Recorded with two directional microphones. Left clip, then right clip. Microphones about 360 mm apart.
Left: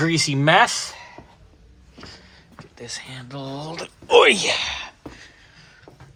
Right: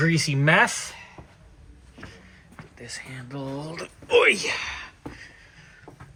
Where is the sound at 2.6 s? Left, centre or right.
Centre.